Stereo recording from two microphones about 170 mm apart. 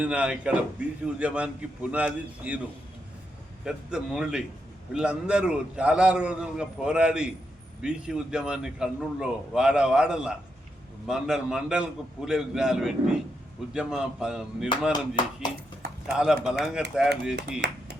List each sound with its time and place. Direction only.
0.0 s a man's voice: 5° right (ahead or behind)
3.6 s a man's voice: 5° right (ahead or behind)
16.0 s a man's voice: 5° right (ahead or behind)
17.6 s speech: 80° right